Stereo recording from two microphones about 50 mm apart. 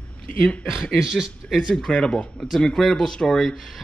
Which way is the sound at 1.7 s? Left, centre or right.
Centre.